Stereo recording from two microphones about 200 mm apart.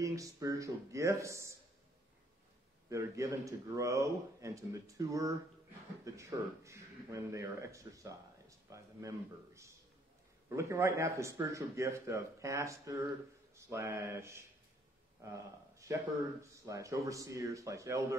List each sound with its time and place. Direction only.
0.0 s speech: 15° right (ahead or behind)
2.9 s a man's voice: 15° right (ahead or behind)